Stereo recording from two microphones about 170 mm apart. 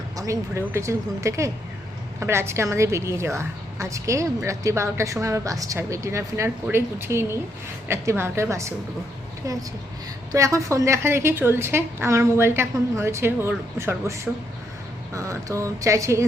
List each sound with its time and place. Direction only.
0.2 s a woman's voice: 15° right (ahead or behind)